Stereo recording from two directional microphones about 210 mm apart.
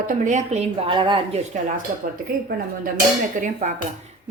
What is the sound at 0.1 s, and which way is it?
Speech, 35° right (ahead or behind).